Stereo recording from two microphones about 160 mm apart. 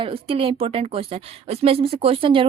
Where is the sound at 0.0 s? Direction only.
35° right (ahead or behind).